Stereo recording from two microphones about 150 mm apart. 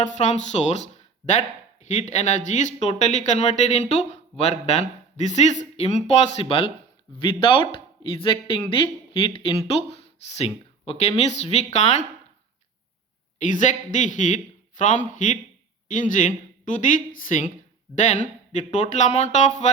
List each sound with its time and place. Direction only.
0.0 s speech: 50° left (ahead or behind)
1.9 s speech: 50° left (ahead or behind)
13.4 s a man's voice: 55° left (ahead or behind)